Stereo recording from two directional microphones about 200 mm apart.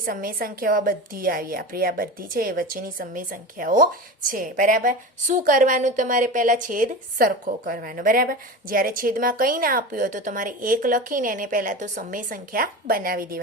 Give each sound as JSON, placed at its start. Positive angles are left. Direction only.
{"t": 0.0, "sound": "a woman's voice", "side_deg": -45}